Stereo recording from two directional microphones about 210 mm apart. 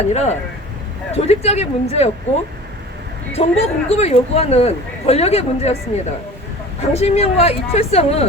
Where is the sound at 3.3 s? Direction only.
30° left (ahead or behind).